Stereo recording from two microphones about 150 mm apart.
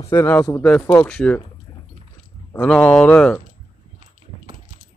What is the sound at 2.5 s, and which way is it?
Speech, 10° left (ahead or behind).